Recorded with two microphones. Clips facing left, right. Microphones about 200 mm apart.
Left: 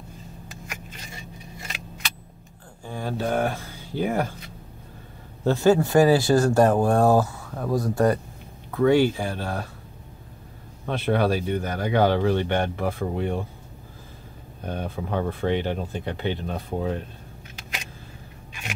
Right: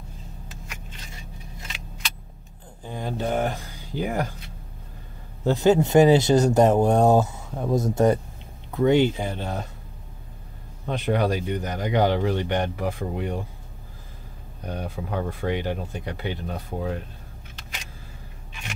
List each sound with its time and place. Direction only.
2.8 s speech: 20° right (ahead or behind)
5.4 s speech: 15° right (ahead or behind)
10.9 s speech: 15° right (ahead or behind)
14.7 s speech: 10° right (ahead or behind)